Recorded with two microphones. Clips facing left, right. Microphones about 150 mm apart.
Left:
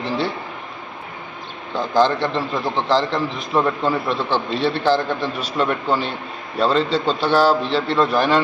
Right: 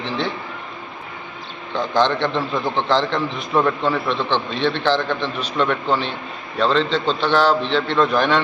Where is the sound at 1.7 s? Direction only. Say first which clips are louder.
Left 1 dB; 5° left (ahead or behind).